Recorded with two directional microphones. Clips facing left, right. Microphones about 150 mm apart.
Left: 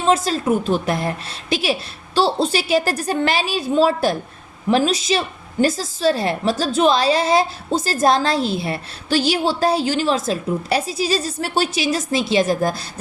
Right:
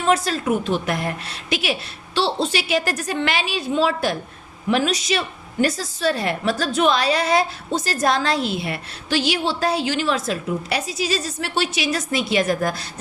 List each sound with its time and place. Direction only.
0.0 s a woman's voice: 30° left (ahead or behind)
11.9 s a woman's voice: 25° left (ahead or behind)